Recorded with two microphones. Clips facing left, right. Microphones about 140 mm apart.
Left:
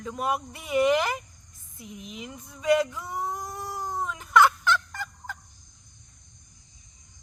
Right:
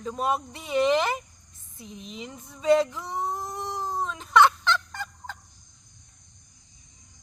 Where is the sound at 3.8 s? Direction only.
25° right (ahead or behind).